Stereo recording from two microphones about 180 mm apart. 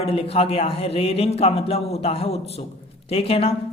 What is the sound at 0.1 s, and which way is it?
Speech, 30° left (ahead or behind).